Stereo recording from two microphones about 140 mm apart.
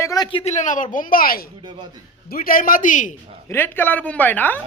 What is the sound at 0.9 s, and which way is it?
A man's voice, 80° left.